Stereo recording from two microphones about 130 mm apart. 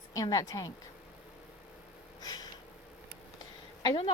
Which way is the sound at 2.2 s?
30° left (ahead or behind).